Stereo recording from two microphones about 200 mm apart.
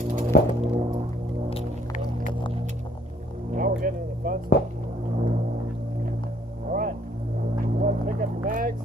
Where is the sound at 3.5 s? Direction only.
45° right (ahead or behind).